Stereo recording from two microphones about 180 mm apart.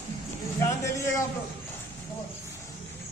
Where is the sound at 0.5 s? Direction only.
15° left (ahead or behind).